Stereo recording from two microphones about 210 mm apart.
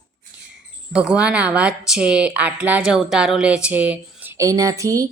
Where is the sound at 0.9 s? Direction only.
5° right (ahead or behind).